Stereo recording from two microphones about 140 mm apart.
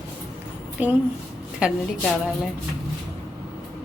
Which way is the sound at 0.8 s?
10° right (ahead or behind).